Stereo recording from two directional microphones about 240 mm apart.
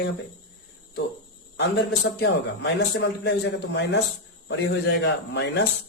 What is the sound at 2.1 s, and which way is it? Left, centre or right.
Speech, left.